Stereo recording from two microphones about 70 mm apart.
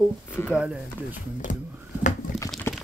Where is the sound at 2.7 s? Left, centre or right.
Left.